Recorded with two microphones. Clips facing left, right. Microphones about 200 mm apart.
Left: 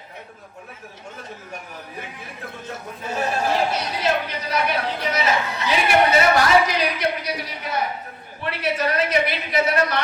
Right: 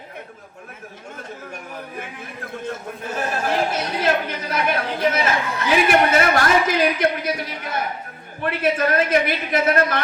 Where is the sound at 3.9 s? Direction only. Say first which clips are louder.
Right 4 dB; 50° right (ahead or behind).